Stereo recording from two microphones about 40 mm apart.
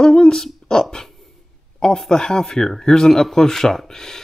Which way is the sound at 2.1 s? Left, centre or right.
Centre.